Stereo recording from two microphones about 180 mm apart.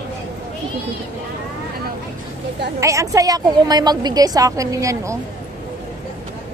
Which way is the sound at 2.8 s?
15° right (ahead or behind).